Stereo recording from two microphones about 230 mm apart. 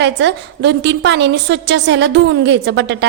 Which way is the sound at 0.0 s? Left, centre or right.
Right.